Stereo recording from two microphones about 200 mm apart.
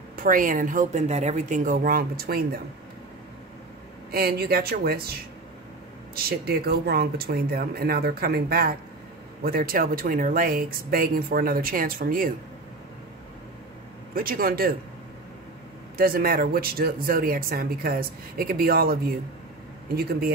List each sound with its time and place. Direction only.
0.1 s speech: 45° right (ahead or behind)
4.1 s speech: 50° right (ahead or behind)
6.1 s speech: 50° right (ahead or behind)
14.1 s speech: 45° right (ahead or behind)
16.0 s speech: 45° right (ahead or behind)